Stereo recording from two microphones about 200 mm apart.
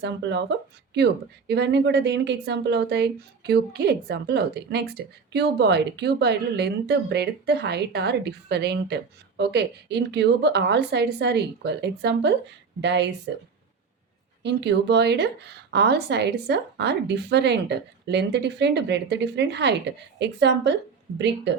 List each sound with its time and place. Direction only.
0.0 s a woman's voice: 60° right (ahead or behind)
14.4 s a woman's voice: 60° right (ahead or behind)